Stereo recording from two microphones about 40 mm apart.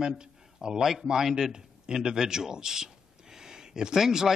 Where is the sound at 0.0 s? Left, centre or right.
Centre.